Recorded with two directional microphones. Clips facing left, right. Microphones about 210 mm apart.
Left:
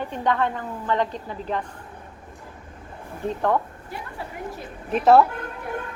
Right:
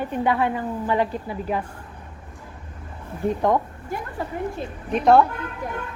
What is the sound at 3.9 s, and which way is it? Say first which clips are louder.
Speech: right 6 dB; 45° right (ahead or behind).